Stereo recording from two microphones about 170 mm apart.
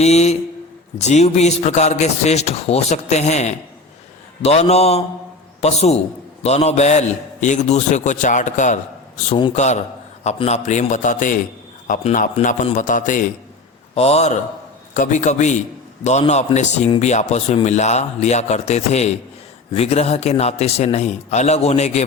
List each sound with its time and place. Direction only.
0.0 s a man's voice: 40° left (ahead or behind)
13.9 s a man's voice: 35° left (ahead or behind)